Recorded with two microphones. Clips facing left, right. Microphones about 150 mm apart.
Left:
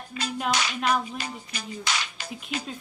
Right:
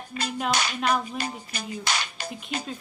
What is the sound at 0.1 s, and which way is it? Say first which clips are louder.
Clapping: right 1 dB; 45° right (ahead or behind).